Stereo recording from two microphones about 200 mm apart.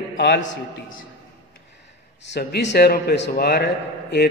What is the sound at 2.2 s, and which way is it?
A man's voice, 60° left (ahead or behind).